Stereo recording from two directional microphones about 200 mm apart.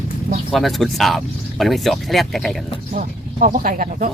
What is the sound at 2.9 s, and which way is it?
Speech, 40° right (ahead or behind).